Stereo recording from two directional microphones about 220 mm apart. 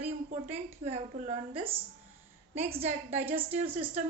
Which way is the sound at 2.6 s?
30° right (ahead or behind).